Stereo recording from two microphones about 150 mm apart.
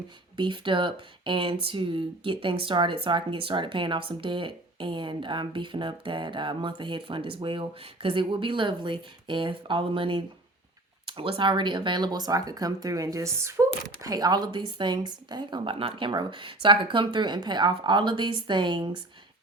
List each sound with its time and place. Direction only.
0.3 s speech: 35° right (ahead or behind)